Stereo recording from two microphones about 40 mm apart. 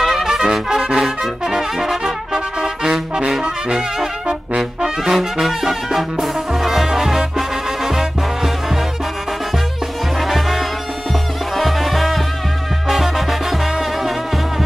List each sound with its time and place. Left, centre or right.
0.0 s trumpet: centre
1.4 s brass instrument: centre
10.2 s music: centre